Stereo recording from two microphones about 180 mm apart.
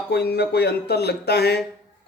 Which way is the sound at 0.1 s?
65° left (ahead or behind).